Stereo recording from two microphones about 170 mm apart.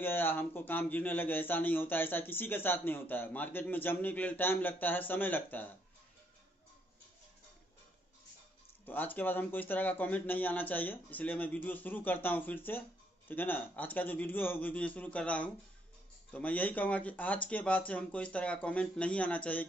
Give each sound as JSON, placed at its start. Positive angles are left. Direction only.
{"t": 0.0, "sound": "a man's voice", "side_deg": 10}
{"t": 8.8, "sound": "a man's voice", "side_deg": 10}